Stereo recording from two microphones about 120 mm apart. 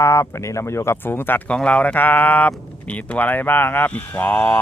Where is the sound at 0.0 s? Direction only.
25° left (ahead or behind).